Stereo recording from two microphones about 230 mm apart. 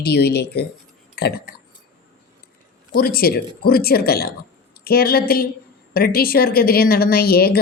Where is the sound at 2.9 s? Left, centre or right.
Left.